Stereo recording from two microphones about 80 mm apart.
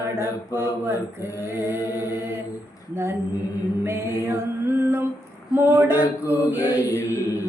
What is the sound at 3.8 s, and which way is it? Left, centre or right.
Music, right.